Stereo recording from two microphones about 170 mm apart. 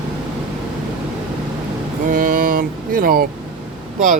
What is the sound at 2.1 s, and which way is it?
Speech, 55° right (ahead or behind).